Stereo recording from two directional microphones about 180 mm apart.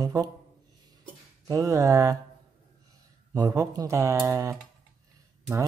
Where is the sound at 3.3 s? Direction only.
20° right (ahead or behind).